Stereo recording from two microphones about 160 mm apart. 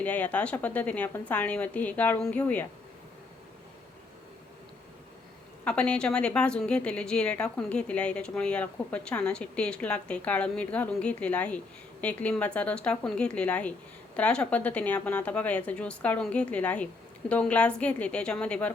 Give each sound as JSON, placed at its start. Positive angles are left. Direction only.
{"t": 0.0, "sound": "a woman's voice", "side_deg": 10}
{"t": 5.6, "sound": "a woman's voice", "side_deg": 5}